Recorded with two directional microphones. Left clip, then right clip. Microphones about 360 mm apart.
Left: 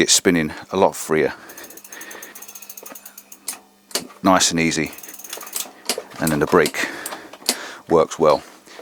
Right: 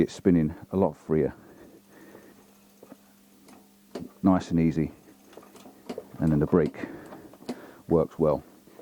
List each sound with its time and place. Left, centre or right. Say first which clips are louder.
0.0 s speech: left 8 dB; centre
3.4 s mechanisms: left 18 dB; centre